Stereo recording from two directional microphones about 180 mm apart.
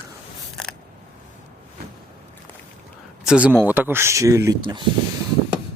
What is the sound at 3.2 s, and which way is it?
Speech, 5° right (ahead or behind).